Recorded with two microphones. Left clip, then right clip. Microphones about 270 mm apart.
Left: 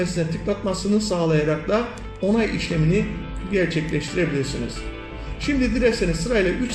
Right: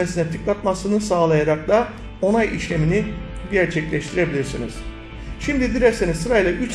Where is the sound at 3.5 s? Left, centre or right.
Right.